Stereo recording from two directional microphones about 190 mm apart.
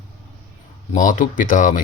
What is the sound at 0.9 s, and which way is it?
Mantra, 40° left (ahead or behind).